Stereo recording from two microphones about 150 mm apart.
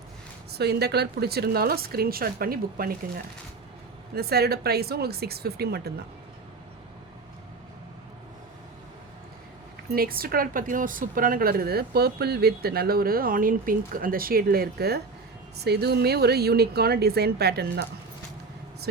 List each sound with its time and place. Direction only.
0.5 s a woman's voice: 90° right
4.1 s a woman's voice: 90° right
9.9 s a woman's voice: 80° right